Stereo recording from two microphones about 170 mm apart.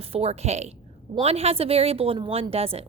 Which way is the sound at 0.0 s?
35° right (ahead or behind).